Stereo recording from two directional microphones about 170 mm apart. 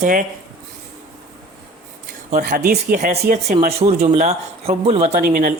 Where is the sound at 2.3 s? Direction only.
50° right (ahead or behind).